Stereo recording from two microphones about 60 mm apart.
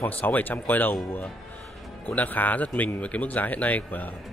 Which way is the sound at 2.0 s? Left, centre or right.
Left.